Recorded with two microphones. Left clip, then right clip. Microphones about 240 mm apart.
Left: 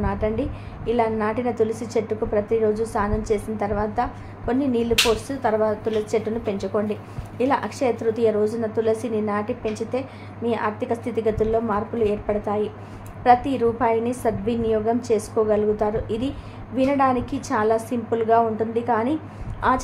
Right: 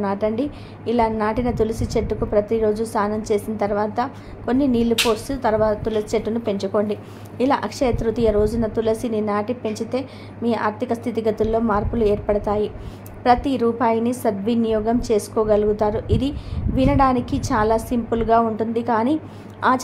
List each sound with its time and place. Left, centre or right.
0.0 s speech: right